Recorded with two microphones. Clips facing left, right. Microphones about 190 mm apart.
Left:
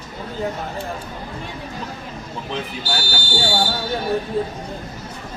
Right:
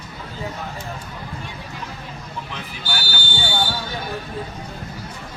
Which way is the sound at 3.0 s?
40° left (ahead or behind).